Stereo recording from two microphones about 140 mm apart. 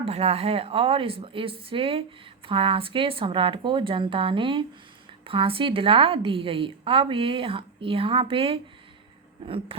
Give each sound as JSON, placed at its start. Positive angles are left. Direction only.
{"t": 0.0, "sound": "a woman's voice", "side_deg": -45}